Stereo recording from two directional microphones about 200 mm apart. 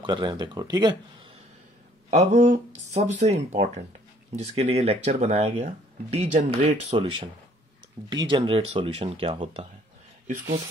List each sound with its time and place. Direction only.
0.0 s speech: 20° right (ahead or behind)
2.0 s speech: 35° right (ahead or behind)